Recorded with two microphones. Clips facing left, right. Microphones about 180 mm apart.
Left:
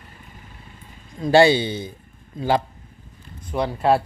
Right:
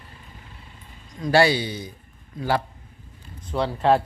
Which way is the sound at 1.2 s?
25° left (ahead or behind).